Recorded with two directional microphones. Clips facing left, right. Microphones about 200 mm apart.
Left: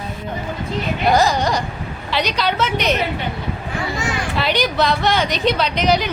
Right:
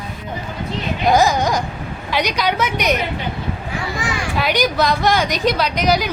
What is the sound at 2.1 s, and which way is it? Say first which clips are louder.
Speech: right 1 dB; 15° right (ahead or behind).